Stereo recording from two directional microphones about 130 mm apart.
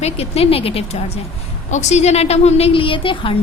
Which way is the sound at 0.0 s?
50° left (ahead or behind).